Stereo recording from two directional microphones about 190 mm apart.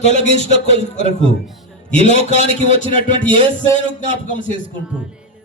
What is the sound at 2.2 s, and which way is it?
Speech, 30° right (ahead or behind).